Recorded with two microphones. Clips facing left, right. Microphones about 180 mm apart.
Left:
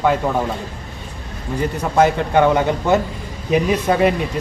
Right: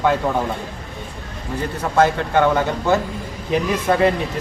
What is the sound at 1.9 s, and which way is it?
Speech, 15° left (ahead or behind).